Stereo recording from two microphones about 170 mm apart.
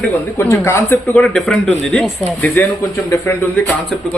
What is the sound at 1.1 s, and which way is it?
A man's voice, 5° left (ahead or behind).